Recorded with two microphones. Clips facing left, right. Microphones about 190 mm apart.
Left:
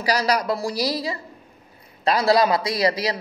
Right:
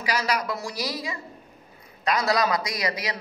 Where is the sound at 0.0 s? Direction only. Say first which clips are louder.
Left 5 dB; 35° left (ahead or behind).